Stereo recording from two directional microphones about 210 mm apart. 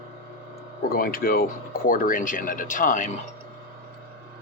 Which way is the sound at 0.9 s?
45° left (ahead or behind).